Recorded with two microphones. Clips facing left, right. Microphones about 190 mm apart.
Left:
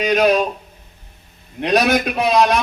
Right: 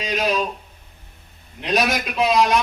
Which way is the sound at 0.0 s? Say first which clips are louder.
Left 7 dB; 65° left (ahead or behind).